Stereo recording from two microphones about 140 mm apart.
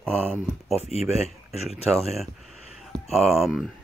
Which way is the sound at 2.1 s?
Centre (ahead or behind).